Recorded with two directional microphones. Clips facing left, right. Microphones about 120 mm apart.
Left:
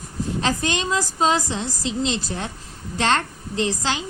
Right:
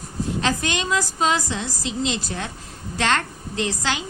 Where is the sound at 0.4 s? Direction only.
30° left (ahead or behind).